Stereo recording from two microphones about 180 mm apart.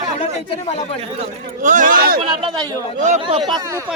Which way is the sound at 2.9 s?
40° right (ahead or behind).